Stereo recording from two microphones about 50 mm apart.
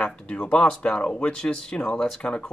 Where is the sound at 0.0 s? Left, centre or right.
Left.